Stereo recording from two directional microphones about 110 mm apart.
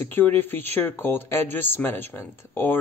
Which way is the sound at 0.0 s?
20° left (ahead or behind).